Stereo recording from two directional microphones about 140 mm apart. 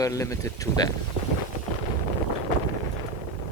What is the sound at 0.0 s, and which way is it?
Speech, 20° left (ahead or behind).